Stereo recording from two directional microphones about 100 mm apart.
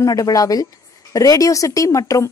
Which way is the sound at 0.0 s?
35° left (ahead or behind).